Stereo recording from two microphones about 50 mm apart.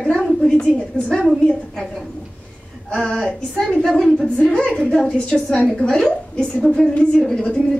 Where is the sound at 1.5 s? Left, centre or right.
Centre.